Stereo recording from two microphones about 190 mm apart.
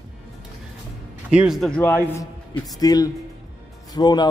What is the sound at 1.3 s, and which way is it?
A man's voice, 5° right (ahead or behind).